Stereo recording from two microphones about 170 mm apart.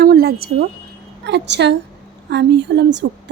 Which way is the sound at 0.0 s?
65° right (ahead or behind).